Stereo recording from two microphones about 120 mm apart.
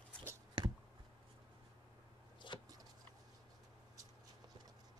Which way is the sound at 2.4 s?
40° left (ahead or behind).